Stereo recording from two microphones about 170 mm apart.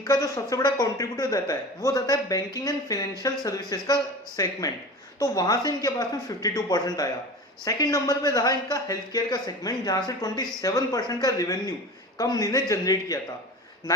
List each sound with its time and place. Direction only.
0.0 s speech: 20° left (ahead or behind)